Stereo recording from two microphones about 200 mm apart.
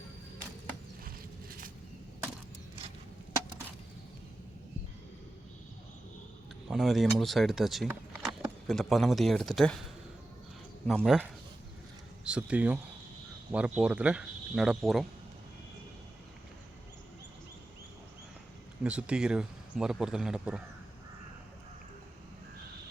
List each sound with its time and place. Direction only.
1.0 s a sound: 45° right (ahead or behind)
6.7 s speech: centre (ahead or behind)
10.8 s speech: centre (ahead or behind)
18.8 s speech: 5° right (ahead or behind)